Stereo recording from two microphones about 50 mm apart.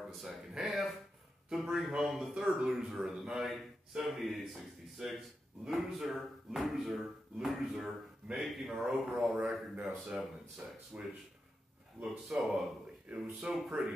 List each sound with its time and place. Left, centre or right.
0.1 s a man's voice: centre
2.5 s a man's voice: centre
10.9 s speech: right
12.0 s speech: centre
12.4 s a man's voice: centre
13.1 s speech: right
13.5 s speech: centre